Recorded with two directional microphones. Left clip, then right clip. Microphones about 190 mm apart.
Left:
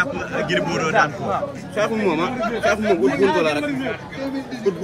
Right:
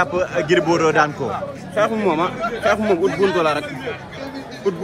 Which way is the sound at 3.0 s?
35° left (ahead or behind).